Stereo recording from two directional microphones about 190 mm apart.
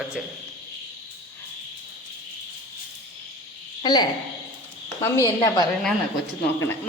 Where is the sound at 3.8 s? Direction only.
20° left (ahead or behind).